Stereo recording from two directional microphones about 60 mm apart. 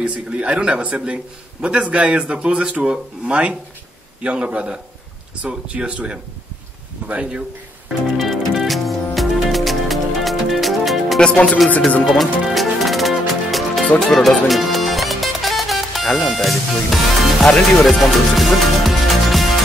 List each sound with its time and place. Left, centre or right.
0.0 s a man's voice: centre
8.2 s music: centre
11.1 s music: centre
12.0 s music: centre
17.4 s speech: centre
18.4 s music: centre